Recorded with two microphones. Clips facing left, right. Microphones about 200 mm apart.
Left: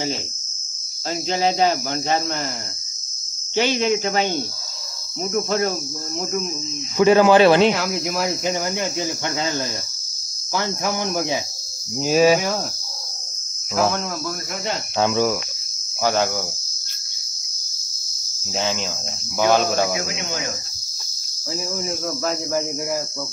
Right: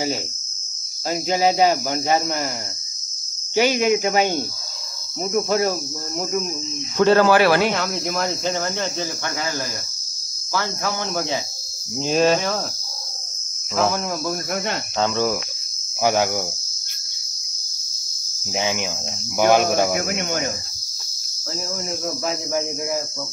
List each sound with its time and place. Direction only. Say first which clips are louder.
1.1 s cricket: right 2 dB; 10° right (ahead or behind)
3.5 s cricket: right 2 dB; 10° right (ahead or behind)
7.0 s speech: left 2 dB; 15° left (ahead or behind)
7.7 s cricket: left 1 dB; 5° left (ahead or behind)
10.5 s cricket: left 1 dB; 15° left (ahead or behind)
13.7 s cricket: even; centre (ahead or behind)
15.0 s cricket: left 2 dB; 10° left (ahead or behind)
16.0 s cricket: right 1 dB; 15° right (ahead or behind)
18.6 s cricket: right 1 dB; 15° right (ahead or behind)
20.0 s cricket: right 4 dB; 50° right (ahead or behind)